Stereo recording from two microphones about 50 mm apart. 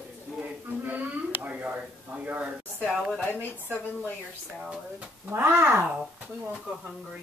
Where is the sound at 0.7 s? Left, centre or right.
Right.